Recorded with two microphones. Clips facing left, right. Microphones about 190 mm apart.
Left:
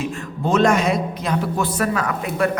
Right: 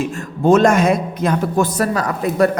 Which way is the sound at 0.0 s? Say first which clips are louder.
Right 6 dB; 50° right (ahead or behind).